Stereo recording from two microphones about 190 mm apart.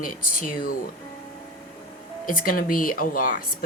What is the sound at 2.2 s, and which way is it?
Speech, 45° left (ahead or behind).